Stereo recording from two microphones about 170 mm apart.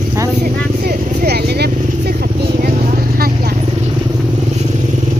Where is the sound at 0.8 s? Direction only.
65° right (ahead or behind).